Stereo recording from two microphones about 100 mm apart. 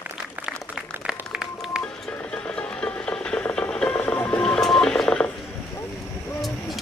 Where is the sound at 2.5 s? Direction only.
10° left (ahead or behind).